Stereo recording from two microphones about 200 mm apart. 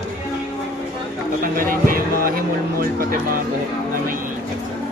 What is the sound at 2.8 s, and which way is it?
Speech, 45° right (ahead or behind).